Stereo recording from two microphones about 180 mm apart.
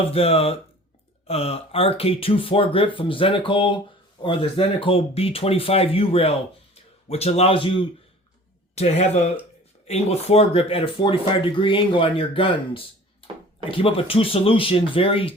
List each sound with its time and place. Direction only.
0.1 s speech: 35° left (ahead or behind)